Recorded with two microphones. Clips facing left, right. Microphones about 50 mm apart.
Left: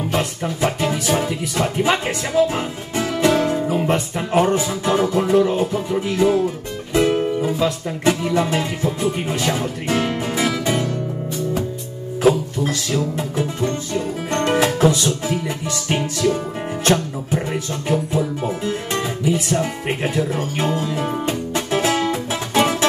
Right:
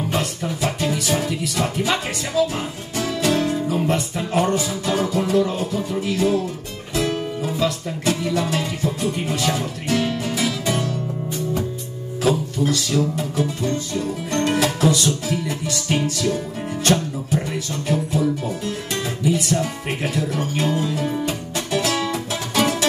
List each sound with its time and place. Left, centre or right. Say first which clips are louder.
0.2 s speech: left 3 dB; left
6.9 s music: left 6 dB; left
7.4 s music: left 2 dB; left
12.9 s speech: even; left
21.3 s music: left 3 dB; left